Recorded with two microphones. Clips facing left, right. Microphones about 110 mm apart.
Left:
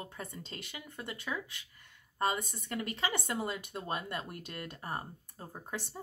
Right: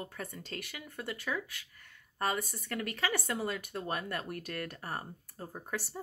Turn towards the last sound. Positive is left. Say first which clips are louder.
# right 2 dB
turn(degrees=20)  # may be behind; listen again after turning